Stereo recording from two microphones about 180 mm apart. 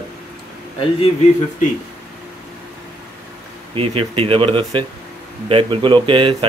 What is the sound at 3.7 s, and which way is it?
Speech, 30° right (ahead or behind).